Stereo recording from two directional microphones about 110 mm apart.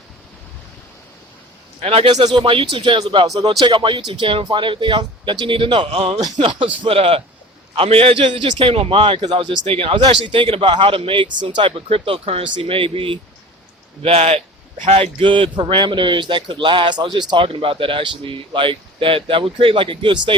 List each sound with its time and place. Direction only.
1.8 s a man's voice: 60° right (ahead or behind)
2.3 s speech: 50° right (ahead or behind)
3.2 s speech: 35° right (ahead or behind)
3.6 s a man's voice: 45° right (ahead or behind); by 15.1 s 70° right (ahead or behind)
15.2 s speech: 50° right (ahead or behind)